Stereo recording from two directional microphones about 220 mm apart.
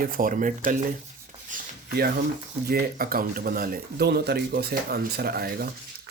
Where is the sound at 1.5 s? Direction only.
35° right (ahead or behind).